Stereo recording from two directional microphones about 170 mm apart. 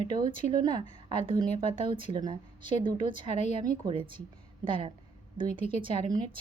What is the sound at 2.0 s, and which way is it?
A woman's voice, 25° right (ahead or behind).